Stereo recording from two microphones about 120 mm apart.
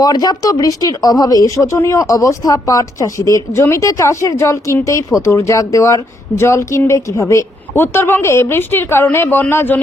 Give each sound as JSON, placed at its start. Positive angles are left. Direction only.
{"t": 0.0, "sound": "speech", "side_deg": 35}